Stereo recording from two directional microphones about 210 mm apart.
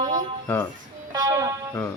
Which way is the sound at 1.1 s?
15° right (ahead or behind).